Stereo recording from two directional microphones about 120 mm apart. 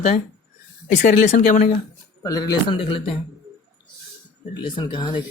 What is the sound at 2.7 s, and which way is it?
Speech, 45° left (ahead or behind).